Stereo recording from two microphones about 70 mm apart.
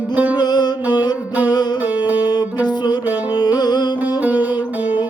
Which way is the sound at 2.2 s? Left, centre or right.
Left.